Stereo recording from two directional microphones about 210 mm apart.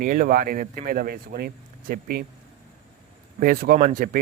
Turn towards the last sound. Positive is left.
turn(degrees=-40)  # may be behind; listen again after turning